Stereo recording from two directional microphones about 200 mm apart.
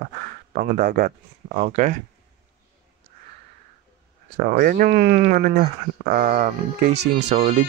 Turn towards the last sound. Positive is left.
turn(degrees=-45)  # may be behind; listen again after turning